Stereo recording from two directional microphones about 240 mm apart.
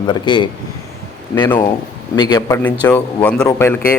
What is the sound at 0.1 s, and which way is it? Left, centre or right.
Speech, centre.